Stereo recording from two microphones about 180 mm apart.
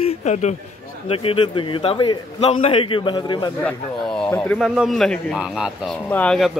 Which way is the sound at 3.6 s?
5° left (ahead or behind).